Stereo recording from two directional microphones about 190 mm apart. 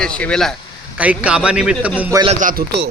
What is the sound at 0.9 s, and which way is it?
A man's voice, 5° right (ahead or behind).